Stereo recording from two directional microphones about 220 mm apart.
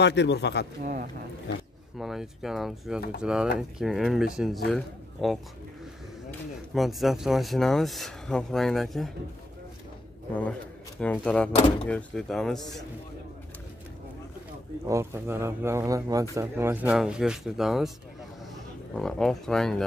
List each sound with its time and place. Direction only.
0.0 s a man's voice: 50° left (ahead or behind)
2.0 s a man's voice: centre (ahead or behind)
6.7 s speech: centre (ahead or behind)
11.0 s speech: 5° left (ahead or behind)
14.9 s speech: 10° right (ahead or behind)
18.9 s speech: centre (ahead or behind)